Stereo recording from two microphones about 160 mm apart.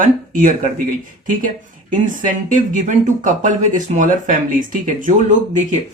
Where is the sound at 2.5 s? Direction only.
55° right (ahead or behind).